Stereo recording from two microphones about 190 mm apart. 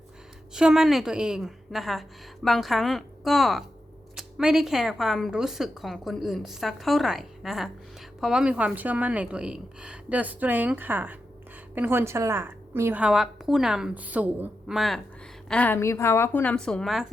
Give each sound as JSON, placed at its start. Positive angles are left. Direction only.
{"t": 0.5, "sound": "a woman's voice", "side_deg": -5}